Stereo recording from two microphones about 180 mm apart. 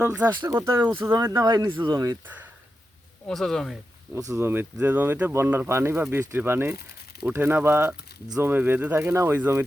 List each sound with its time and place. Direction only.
0.0 s speech: 10° right (ahead or behind)
2.2 s speech: 10° right (ahead or behind)
3.2 s speech: 5° left (ahead or behind)
4.1 s speech: 15° right (ahead or behind)